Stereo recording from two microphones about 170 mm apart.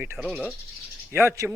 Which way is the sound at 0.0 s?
10° right (ahead or behind).